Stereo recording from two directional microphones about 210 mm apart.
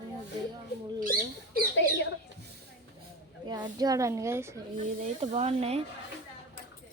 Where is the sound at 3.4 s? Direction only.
20° right (ahead or behind).